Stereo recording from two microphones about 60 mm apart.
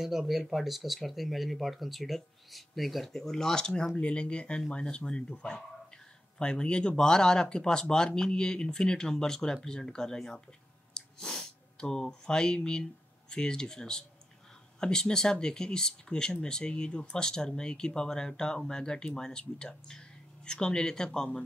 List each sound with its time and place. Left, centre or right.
0.0 s speech: centre